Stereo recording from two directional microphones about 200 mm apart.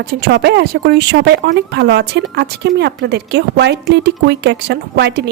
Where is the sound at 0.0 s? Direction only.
50° right (ahead or behind).